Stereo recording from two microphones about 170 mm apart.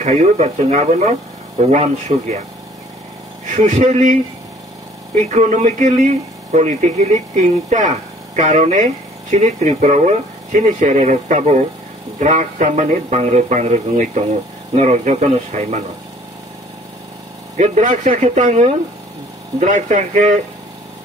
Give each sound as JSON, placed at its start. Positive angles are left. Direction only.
{"t": 0.0, "sound": "speech", "side_deg": -40}
{"t": 3.4, "sound": "speech", "side_deg": -45}
{"t": 5.3, "sound": "speech", "side_deg": -45}
{"t": 17.6, "sound": "speech", "side_deg": -45}